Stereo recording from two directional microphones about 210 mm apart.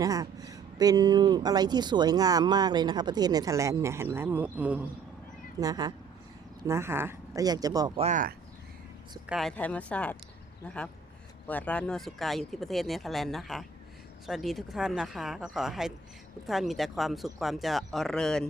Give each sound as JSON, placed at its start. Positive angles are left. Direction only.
{"t": 0.0, "sound": "speech", "side_deg": -15}
{"t": 8.0, "sound": "speech", "side_deg": -40}
{"t": 9.2, "sound": "speech", "side_deg": 0}
{"t": 11.4, "sound": "speech", "side_deg": 5}